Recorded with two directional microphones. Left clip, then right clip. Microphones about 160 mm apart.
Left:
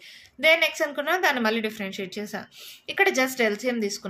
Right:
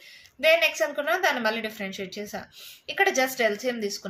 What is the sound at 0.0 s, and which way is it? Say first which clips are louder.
A woman's voice: left 1 dB; 40° left (ahead or behind).